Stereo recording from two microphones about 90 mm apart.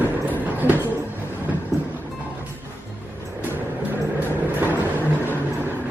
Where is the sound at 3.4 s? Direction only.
20° right (ahead or behind).